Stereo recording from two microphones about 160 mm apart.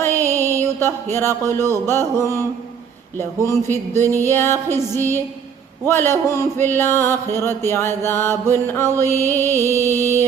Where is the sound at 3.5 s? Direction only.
15° left (ahead or behind).